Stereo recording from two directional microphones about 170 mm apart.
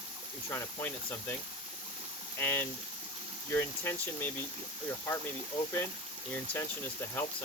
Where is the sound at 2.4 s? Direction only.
10° left (ahead or behind).